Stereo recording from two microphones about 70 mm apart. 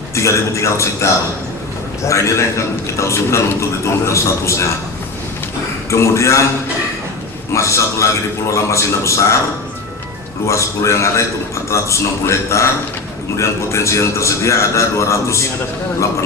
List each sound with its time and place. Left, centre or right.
0.1 s a man's voice: left
5.9 s a man's voice: left
7.5 s a man's voice: left
10.4 s a man's voice: left